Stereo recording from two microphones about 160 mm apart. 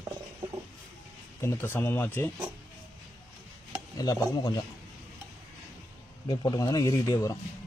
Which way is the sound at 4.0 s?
25° left (ahead or behind).